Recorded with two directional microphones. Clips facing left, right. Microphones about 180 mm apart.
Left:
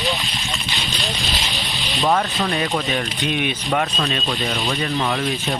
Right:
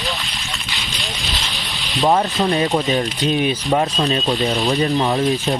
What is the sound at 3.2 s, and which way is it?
Speech, 40° right (ahead or behind).